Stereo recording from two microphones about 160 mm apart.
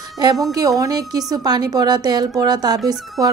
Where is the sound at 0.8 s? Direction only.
25° right (ahead or behind).